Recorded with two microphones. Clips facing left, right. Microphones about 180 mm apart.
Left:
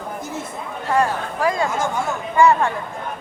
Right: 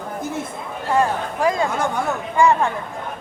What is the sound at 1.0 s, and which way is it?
Speech, 20° right (ahead or behind).